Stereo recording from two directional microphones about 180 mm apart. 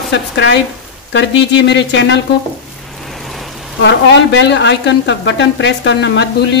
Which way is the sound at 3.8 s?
85° left.